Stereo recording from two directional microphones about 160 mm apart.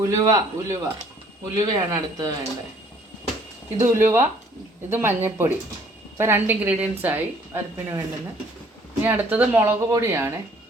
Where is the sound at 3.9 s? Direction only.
15° right (ahead or behind).